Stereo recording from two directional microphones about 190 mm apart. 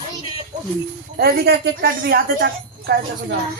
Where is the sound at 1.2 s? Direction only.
55° right (ahead or behind).